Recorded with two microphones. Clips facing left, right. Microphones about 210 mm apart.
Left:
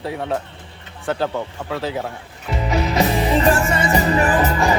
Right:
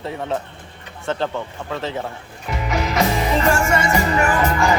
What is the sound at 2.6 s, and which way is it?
Music, 35° left (ahead or behind).